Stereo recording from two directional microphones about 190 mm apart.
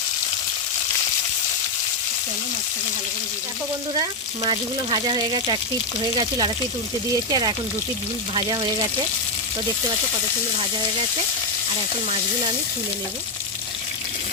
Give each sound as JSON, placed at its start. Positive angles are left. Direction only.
{"t": 4.4, "sound": "speech", "side_deg": -25}